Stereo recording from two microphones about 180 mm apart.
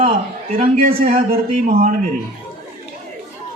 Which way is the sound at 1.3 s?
55° right (ahead or behind).